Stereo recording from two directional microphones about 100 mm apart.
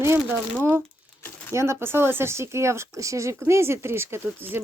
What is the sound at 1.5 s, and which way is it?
Speech, 30° right (ahead or behind).